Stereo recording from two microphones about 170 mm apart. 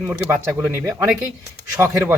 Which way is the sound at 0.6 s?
15° right (ahead or behind).